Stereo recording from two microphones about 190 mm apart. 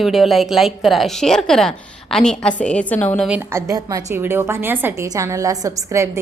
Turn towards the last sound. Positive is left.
turn(degrees=-15)  # may be behind; listen again after turning